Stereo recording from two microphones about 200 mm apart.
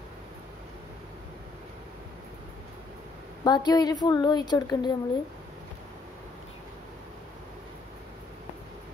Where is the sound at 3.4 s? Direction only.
20° left (ahead or behind).